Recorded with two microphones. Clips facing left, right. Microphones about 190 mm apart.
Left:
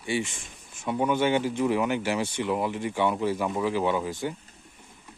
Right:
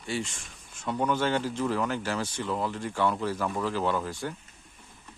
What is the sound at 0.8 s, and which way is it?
Speech, 10° left (ahead or behind).